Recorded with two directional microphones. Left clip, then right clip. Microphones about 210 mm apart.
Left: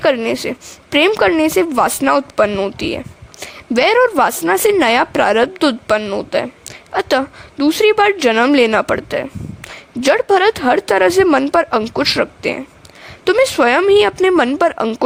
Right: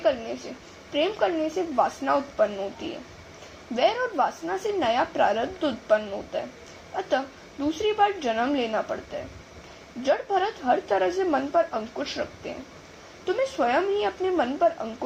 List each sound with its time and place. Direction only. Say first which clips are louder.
0.0 s a woman's voice: left 11 dB; 55° left (ahead or behind)
3.8 s a woman's voice: left 12 dB; 55° left (ahead or behind)